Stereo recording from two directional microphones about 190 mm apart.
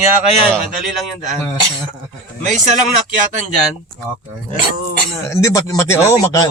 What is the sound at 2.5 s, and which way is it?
Speech, 40° right (ahead or behind).